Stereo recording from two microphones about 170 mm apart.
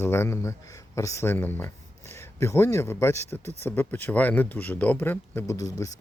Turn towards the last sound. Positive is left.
turn(degrees=20)  # may be behind; listen again after turning